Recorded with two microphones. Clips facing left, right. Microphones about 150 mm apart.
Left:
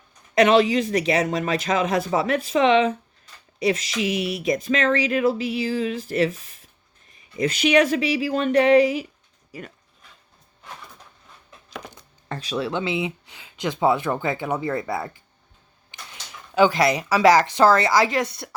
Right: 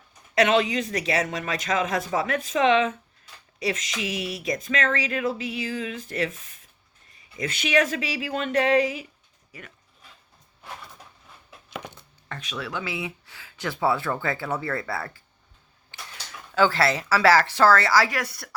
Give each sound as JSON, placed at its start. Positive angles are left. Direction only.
{"t": 0.4, "sound": "speech", "side_deg": 35}
{"t": 3.7, "sound": "speech", "side_deg": 35}
{"t": 4.3, "sound": "speech", "side_deg": 20}
{"t": 4.6, "sound": "speech", "side_deg": 30}
{"t": 7.9, "sound": "speech", "side_deg": 25}
{"t": 9.5, "sound": "speech", "side_deg": 35}
{"t": 12.3, "sound": "speech", "side_deg": 35}
{"t": 15.9, "sound": "a sound", "side_deg": 15}
{"t": 16.6, "sound": "speech", "side_deg": 15}